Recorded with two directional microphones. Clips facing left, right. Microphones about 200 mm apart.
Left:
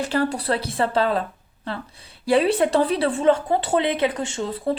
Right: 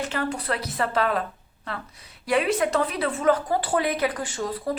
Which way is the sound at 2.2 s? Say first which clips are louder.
Left 4 dB; 30° left (ahead or behind).